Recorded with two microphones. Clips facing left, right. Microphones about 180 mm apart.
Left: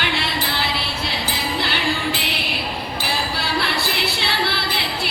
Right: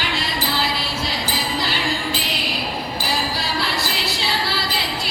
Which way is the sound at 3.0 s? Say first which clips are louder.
Even; 60° left (ahead or behind).